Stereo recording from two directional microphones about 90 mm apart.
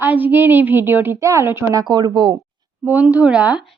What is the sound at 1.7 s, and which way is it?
Speech, 50° right (ahead or behind).